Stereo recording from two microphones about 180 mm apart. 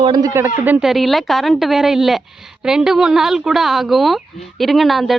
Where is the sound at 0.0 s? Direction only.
20° right (ahead or behind).